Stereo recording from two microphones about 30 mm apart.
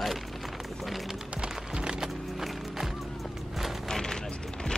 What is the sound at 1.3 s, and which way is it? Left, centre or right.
Music, right.